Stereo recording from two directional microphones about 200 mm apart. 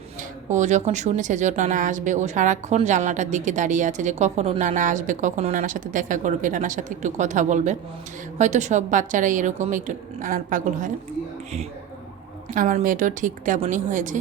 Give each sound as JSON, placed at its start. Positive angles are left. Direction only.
{"t": 0.5, "sound": "speech", "side_deg": -35}
{"t": 12.5, "sound": "speech", "side_deg": -40}